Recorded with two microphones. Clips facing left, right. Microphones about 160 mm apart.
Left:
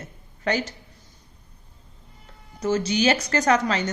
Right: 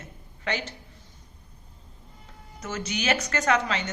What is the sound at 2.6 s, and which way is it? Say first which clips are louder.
A woman's voice: left 10 dB; 30° left (ahead or behind).